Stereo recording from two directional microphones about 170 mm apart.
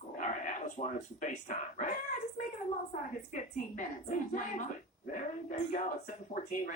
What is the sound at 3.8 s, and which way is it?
Speech, 50° left (ahead or behind).